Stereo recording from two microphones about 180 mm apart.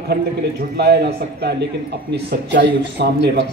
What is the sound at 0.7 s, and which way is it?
A man's voice, 65° right (ahead or behind).